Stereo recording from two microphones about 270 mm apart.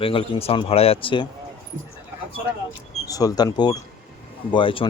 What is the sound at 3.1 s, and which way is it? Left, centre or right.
Speech, centre.